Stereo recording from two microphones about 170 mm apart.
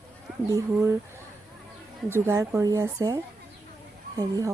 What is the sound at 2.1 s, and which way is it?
Speech, 15° right (ahead or behind).